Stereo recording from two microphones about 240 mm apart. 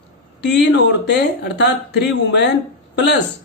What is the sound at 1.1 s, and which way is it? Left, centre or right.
Speech, left.